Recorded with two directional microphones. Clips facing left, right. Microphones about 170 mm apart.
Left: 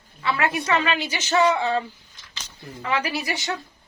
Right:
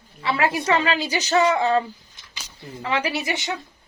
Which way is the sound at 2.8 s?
30° right (ahead or behind).